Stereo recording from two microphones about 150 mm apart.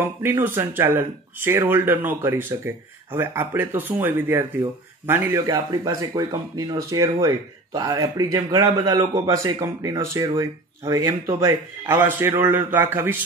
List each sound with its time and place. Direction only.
0.0 s speech: 15° right (ahead or behind)